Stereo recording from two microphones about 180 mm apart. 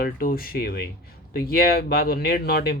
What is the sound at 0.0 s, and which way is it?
Speech, 55° left (ahead or behind).